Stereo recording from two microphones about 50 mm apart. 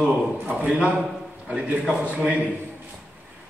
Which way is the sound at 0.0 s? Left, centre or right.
Right.